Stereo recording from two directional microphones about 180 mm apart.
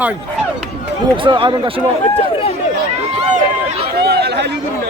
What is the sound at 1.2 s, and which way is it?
Speech, 30° right (ahead or behind).